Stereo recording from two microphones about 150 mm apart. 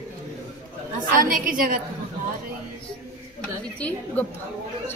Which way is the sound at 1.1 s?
65° right (ahead or behind).